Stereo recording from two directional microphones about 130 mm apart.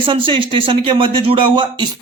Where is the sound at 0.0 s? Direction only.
40° right (ahead or behind).